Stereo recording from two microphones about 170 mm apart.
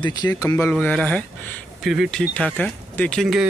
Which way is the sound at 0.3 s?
15° left (ahead or behind).